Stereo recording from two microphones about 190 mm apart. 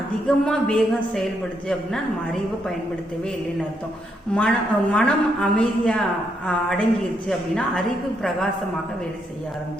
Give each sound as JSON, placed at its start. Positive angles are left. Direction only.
{"t": 0.3, "sound": "a woman's voice", "side_deg": 5}
{"t": 4.4, "sound": "a woman's voice", "side_deg": 5}